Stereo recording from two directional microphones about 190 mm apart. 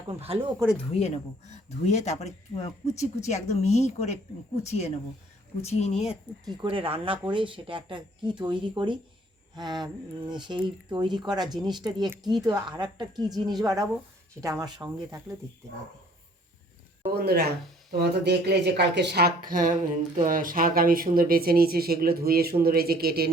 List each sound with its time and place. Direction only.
0.1 s speech: 30° right (ahead or behind)
0.9 s speech: 35° left (ahead or behind)
6.5 s speech: 25° right (ahead or behind)
17.2 s speech: 55° right (ahead or behind)